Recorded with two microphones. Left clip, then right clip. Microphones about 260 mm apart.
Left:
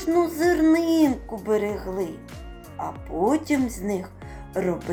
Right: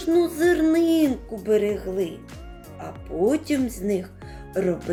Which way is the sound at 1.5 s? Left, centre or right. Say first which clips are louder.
Right 3 dB; right.